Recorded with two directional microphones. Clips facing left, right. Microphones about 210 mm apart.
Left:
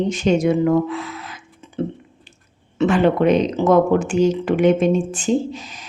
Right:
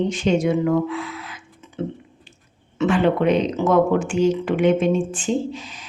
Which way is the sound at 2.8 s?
40° left (ahead or behind).